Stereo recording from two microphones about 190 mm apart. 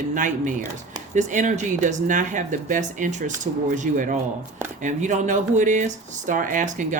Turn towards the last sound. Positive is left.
turn(degrees=-40)  # may be behind; listen again after turning